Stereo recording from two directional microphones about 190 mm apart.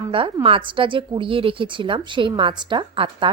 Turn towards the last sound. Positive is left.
turn(degrees=-25)  # may be behind; listen again after turning